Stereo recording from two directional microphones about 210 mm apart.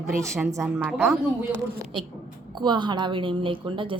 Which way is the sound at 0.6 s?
5° right (ahead or behind).